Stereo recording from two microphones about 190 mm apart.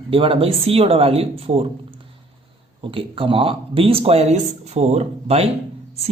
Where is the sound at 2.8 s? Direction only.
25° right (ahead or behind).